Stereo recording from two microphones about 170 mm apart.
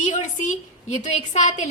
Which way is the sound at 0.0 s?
45° left (ahead or behind).